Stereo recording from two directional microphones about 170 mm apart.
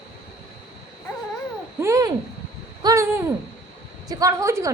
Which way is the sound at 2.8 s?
20° right (ahead or behind).